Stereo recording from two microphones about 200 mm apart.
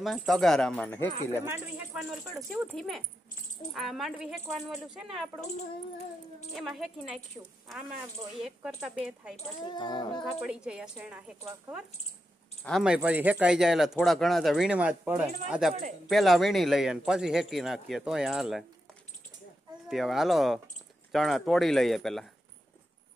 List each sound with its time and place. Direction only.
0.0 s speech: centre (ahead or behind)
2.0 s speech: centre (ahead or behind)
6.5 s speech: centre (ahead or behind)
7.4 s a woman's voice: 15° right (ahead or behind)
8.4 s speech: centre (ahead or behind)
9.7 s speech: 20° left (ahead or behind)
10.4 s speech: 5° right (ahead or behind)
19.9 s speech: centre (ahead or behind)